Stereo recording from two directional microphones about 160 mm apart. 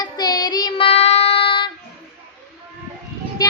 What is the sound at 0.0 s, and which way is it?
Child singing, 25° left (ahead or behind).